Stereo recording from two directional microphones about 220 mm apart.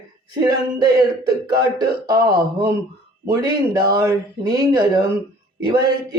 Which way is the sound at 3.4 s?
20° right (ahead or behind).